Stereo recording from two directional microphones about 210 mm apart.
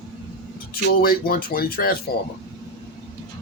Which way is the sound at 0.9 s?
45° left (ahead or behind).